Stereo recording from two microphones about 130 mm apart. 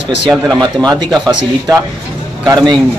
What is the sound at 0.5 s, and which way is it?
Speech, 30° right (ahead or behind).